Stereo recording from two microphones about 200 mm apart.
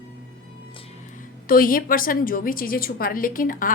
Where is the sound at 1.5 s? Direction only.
45° left (ahead or behind).